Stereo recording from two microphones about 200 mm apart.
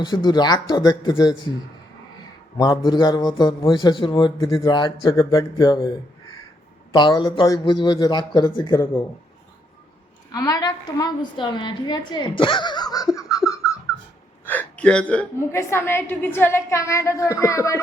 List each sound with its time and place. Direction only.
0.0 s a man's voice: 20° left (ahead or behind)
2.6 s a man's voice: 20° left (ahead or behind)
6.9 s a man's voice: 25° left (ahead or behind)
8.7 s a woman's voice: 10° left (ahead or behind)
10.3 s a woman's voice: 20° left (ahead or behind)